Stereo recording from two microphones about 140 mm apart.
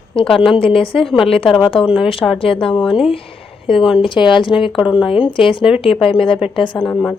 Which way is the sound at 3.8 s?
5° right (ahead or behind).